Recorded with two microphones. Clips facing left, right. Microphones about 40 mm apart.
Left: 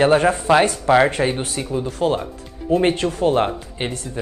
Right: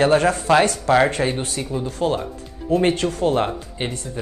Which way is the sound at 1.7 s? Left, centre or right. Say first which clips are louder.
Left 2 dB; centre.